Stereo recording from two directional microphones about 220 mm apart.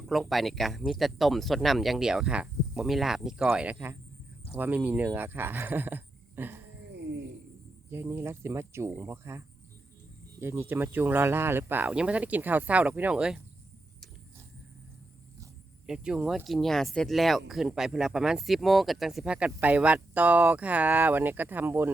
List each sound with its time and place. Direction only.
0.1 s speech: centre (ahead or behind)
6.9 s cricket: 50° right (ahead or behind)
7.9 s speech: 10° right (ahead or behind)
10.4 s speech: 10° right (ahead or behind)
15.9 s speech: 5° right (ahead or behind)